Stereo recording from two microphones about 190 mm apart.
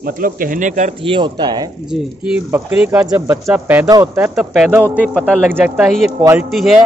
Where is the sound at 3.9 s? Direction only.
20° right (ahead or behind).